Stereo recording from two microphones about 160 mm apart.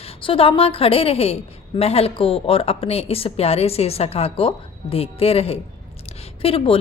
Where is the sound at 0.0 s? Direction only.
35° left (ahead or behind).